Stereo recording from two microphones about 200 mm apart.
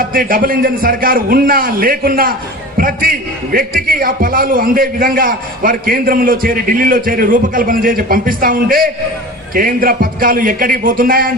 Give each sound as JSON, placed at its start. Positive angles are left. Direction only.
{"t": 0.1, "sound": "a man's voice", "side_deg": -45}